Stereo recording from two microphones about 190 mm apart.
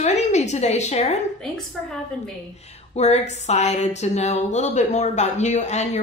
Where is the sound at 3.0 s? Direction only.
35° left (ahead or behind).